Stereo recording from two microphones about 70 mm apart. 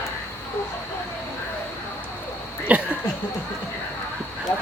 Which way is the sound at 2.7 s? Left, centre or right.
Centre.